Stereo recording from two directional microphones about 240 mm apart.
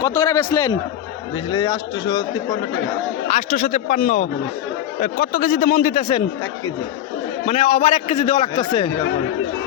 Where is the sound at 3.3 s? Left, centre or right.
Left.